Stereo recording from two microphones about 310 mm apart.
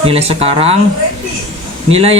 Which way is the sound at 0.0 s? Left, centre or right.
Centre.